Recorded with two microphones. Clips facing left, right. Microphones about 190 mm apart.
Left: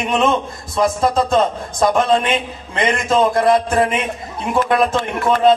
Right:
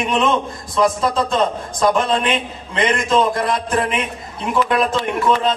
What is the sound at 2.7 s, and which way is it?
Speech, 45° left (ahead or behind).